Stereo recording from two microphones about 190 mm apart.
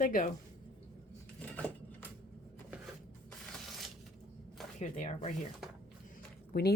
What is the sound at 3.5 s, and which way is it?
Crushing, centre (ahead or behind).